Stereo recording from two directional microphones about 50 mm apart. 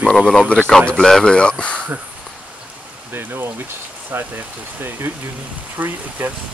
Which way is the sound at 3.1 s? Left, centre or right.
Right.